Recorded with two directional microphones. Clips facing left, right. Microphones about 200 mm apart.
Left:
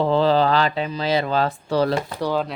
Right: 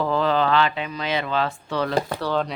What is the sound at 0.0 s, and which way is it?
Speech, 30° left (ahead or behind).